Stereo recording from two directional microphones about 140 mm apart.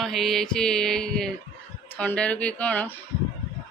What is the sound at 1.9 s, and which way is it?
Speech, 10° left (ahead or behind).